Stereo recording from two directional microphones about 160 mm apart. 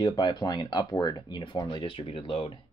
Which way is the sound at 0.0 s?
25° left (ahead or behind).